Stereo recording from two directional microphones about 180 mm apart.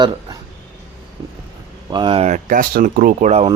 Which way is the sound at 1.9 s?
25° right (ahead or behind).